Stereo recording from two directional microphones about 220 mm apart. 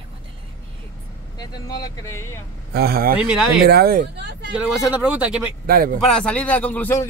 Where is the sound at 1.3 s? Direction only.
15° left (ahead or behind).